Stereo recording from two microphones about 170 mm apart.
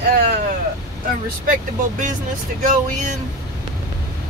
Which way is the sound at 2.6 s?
45° right (ahead or behind).